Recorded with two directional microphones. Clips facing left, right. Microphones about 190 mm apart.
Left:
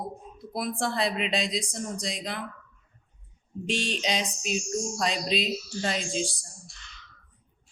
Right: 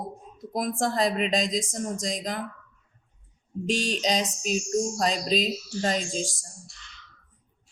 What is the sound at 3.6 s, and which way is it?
Speech, 40° right (ahead or behind).